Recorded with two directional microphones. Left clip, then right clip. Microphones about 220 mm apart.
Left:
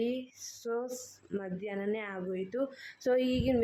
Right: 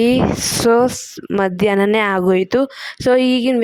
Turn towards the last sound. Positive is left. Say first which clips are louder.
# right 15 dB
turn(degrees=-40)  # may be behind; listen again after turning